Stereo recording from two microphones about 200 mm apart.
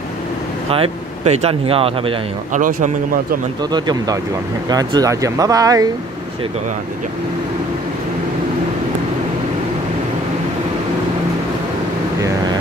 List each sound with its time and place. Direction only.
0.7 s speech: 30° right (ahead or behind)
2.6 s speech: 40° right (ahead or behind)
3.7 s speech: 20° right (ahead or behind)